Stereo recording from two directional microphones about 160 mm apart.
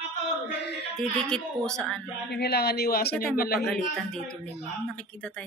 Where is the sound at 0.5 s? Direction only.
90° left.